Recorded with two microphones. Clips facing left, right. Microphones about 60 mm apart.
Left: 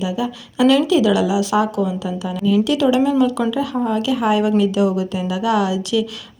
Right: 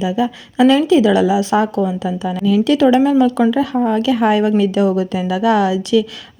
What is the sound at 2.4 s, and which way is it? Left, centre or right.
Speech, right.